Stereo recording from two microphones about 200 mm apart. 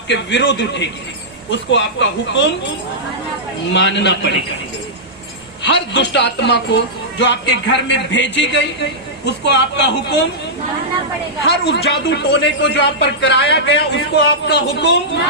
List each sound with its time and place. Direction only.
0.1 s a woman's voice: 65° left (ahead or behind)
3.7 s a woman's voice: 60° left (ahead or behind)
5.6 s a woman's voice: 60° left (ahead or behind)
11.4 s a woman's voice: 55° left (ahead or behind)